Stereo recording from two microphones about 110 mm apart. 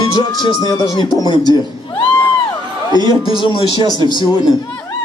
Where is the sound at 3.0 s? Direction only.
40° right (ahead or behind).